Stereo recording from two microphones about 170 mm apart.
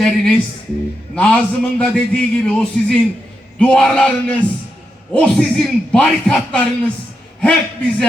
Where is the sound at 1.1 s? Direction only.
5° left (ahead or behind).